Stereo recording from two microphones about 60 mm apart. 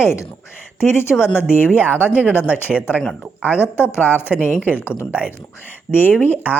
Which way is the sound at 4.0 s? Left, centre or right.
Left.